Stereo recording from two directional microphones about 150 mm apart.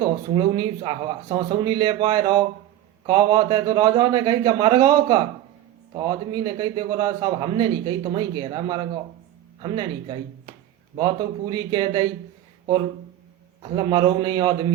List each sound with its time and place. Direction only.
0.0 s a man's voice: 30° right (ahead or behind)
13.6 s a man's voice: 35° right (ahead or behind)